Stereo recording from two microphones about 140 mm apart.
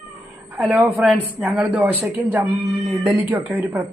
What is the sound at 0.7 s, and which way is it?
Speech, 10° right (ahead or behind).